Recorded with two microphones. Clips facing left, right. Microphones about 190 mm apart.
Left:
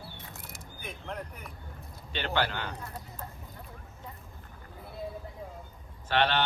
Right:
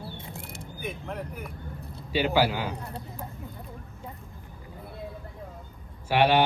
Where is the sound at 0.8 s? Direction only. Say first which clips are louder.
Right 4 dB; centre (ahead or behind).